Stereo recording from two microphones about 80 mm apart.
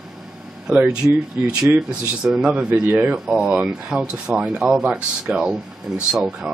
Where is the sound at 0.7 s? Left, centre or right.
Centre.